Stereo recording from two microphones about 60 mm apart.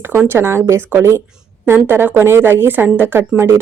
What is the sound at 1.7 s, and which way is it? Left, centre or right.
Speech, right.